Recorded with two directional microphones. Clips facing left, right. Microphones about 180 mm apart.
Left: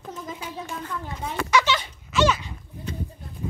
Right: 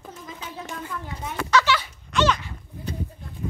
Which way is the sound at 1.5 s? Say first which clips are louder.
Right 1 dB; 20° left (ahead or behind).